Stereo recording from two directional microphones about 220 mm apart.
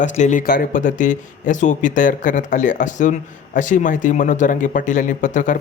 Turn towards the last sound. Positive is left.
turn(degrees=35)  # may be behind; listen again after turning